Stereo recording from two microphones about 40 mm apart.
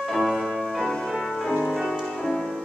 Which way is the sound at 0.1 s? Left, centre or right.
Centre.